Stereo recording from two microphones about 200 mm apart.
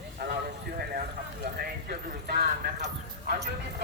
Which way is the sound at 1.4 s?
50° right (ahead or behind).